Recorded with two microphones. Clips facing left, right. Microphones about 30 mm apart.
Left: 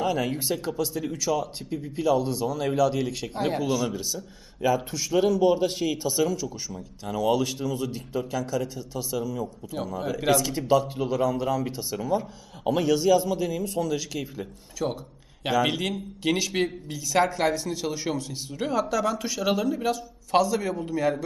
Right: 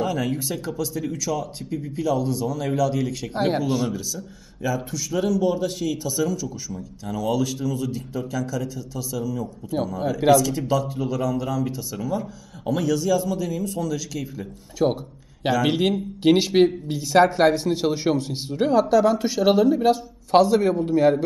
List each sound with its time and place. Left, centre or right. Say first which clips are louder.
0.0 s speech: right 1 dB; centre
3.3 s a man's voice: right 4 dB; centre
3.9 s a man's voice: right 2 dB; left
14.8 s a man's voice: right 8 dB; centre